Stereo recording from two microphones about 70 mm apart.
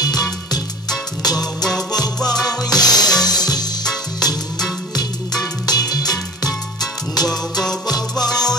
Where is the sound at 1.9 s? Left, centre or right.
Left.